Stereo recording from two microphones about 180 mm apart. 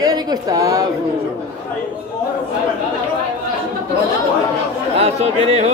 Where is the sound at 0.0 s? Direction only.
20° right (ahead or behind).